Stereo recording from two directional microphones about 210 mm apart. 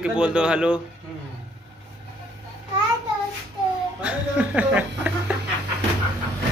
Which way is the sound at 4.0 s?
5° right (ahead or behind).